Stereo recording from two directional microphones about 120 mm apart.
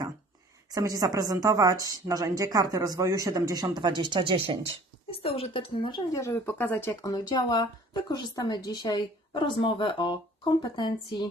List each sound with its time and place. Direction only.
0.7 s a woman's voice: 30° right (ahead or behind); by 4.7 s 50° right (ahead or behind)
5.1 s speech: 55° left (ahead or behind)
6.1 s speech: 25° left (ahead or behind)
6.4 s speech: 15° left (ahead or behind)
6.9 s speech: 30° left (ahead or behind)